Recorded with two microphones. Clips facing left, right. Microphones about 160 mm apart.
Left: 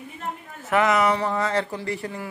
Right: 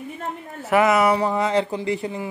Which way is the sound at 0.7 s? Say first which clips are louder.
Right 3 dB; 10° right (ahead or behind).